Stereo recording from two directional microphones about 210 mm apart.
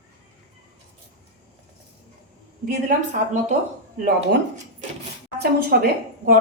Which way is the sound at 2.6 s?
35° right (ahead or behind).